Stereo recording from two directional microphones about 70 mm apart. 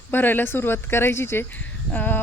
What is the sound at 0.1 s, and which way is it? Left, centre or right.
Speech, left.